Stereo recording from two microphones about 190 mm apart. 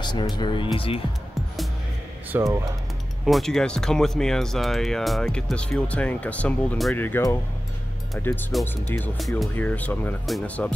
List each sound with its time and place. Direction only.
0.0 s speech: 25° left (ahead or behind)
2.3 s speech: 15° right (ahead or behind)
3.3 s speech: centre (ahead or behind)